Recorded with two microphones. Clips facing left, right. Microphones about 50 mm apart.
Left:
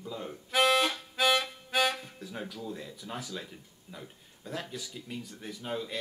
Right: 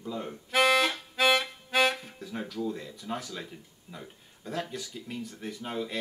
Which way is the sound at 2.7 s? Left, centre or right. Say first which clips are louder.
Right 4 dB; centre.